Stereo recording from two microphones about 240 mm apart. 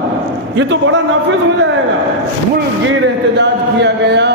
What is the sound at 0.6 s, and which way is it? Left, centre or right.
Speech, right.